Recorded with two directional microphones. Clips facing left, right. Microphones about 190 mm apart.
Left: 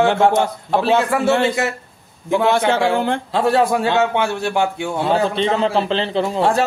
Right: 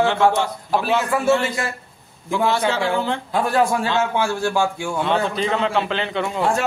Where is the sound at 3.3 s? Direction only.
25° left (ahead or behind).